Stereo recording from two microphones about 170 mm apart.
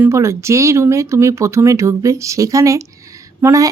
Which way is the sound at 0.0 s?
15° right (ahead or behind).